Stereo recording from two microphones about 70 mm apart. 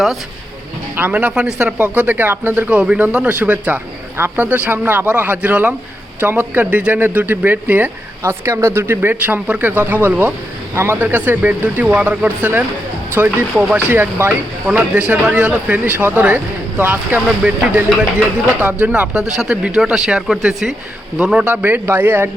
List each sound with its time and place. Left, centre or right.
0.9 s speech: right
8.3 s speech: right
9.0 s speech: right
18.6 s speech: right
19.4 s speech: centre
21.5 s speech: right